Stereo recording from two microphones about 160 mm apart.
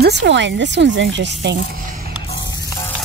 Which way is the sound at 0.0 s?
90° right.